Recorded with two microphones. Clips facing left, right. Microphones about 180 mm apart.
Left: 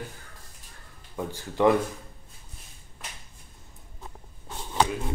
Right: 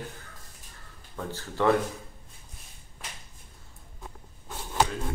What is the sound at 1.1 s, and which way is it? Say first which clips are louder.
Speech: left 3 dB; 15° left (ahead or behind).